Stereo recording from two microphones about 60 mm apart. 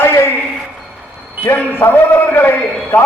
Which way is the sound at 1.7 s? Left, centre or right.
Left.